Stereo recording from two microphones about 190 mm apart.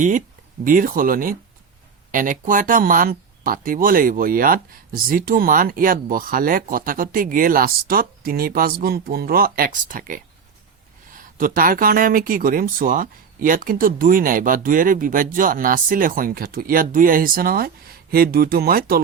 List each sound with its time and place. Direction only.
0.6 s speech: 45° right (ahead or behind)
11.2 s speech: 45° right (ahead or behind)